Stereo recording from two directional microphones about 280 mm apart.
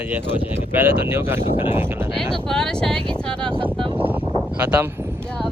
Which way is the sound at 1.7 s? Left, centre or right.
Centre.